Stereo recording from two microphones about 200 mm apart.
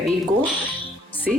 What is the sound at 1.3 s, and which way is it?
Speech, centre (ahead or behind).